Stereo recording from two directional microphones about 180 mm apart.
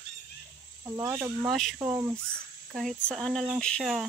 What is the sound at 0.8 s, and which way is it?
Speech, 15° right (ahead or behind).